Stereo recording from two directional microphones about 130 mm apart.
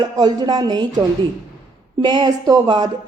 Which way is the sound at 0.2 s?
35° right (ahead or behind).